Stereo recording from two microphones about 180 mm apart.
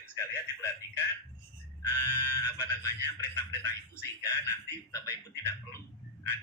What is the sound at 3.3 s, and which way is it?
Speech, 15° left (ahead or behind).